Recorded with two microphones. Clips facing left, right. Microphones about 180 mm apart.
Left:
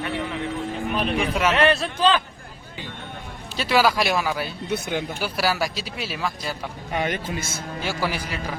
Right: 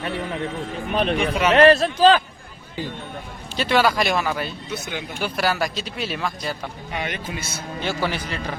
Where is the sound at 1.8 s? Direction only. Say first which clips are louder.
Right 6 dB; 35° right (ahead or behind).